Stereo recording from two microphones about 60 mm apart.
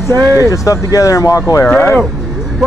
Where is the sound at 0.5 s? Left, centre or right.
Left.